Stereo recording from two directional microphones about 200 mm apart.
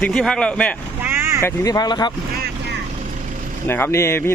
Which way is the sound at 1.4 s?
15° left (ahead or behind).